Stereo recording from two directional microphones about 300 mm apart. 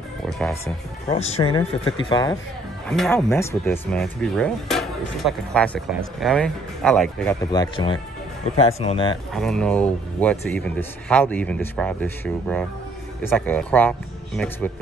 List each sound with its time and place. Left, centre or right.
0.4 s speech: centre
1.0 s speech: left
2.9 s speech: centre
7.5 s speech: centre
9.3 s speech: centre